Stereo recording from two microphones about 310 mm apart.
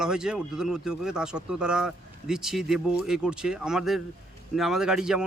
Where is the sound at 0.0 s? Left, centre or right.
Centre.